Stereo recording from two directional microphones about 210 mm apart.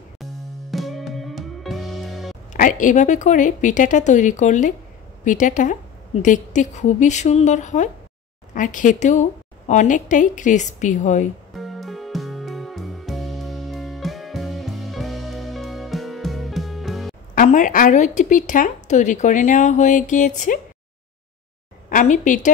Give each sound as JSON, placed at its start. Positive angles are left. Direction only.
{"t": 0.2, "sound": "music", "side_deg": 0}
{"t": 2.5, "sound": "a woman's voice", "side_deg": 40}
{"t": 11.5, "sound": "music", "side_deg": 0}
{"t": 17.4, "sound": "a woman's voice", "side_deg": 40}
{"t": 21.8, "sound": "a woman's voice", "side_deg": 35}